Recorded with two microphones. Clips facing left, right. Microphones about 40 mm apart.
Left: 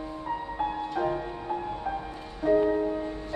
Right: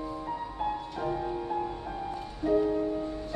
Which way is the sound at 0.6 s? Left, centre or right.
Centre.